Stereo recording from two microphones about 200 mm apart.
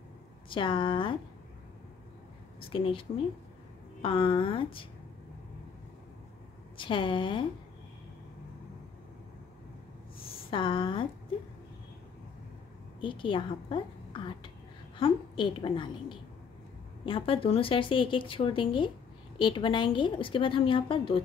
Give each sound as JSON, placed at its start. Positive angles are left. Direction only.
{"t": 0.5, "sound": "speech", "side_deg": 25}
{"t": 2.7, "sound": "speech", "side_deg": 25}
{"t": 6.8, "sound": "speech", "side_deg": 25}
{"t": 10.5, "sound": "speech", "side_deg": 25}
{"t": 13.0, "sound": "speech", "side_deg": 25}